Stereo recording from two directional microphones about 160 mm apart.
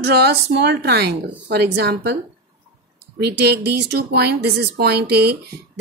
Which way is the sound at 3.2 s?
90° right.